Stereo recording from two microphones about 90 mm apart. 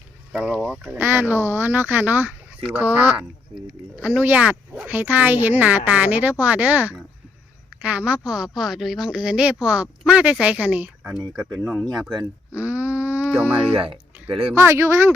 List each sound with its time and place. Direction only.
0.3 s speech: 10° right (ahead or behind)
0.9 s a woman's voice: 25° right (ahead or behind)
11.2 s speech: centre (ahead or behind)
12.5 s groan: 15° right (ahead or behind)
13.7 s speech: 80° right
14.5 s speech: 30° right (ahead or behind)